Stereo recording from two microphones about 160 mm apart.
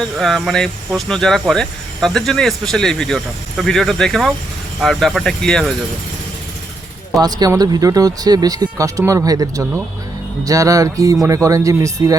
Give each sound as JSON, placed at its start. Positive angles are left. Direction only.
{"t": 0.0, "sound": "speech", "side_deg": 0}
{"t": 7.2, "sound": "speech", "side_deg": -25}